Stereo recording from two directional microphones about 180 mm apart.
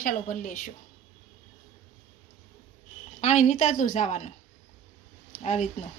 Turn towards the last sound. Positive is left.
turn(degrees=40)  # may be behind; listen again after turning